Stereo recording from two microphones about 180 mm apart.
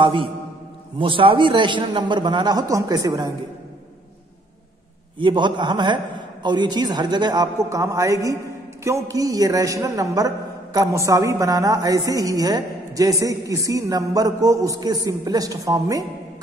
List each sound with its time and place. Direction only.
0.0 s a man's voice: 30° right (ahead or behind)
5.2 s a man's voice: 25° right (ahead or behind)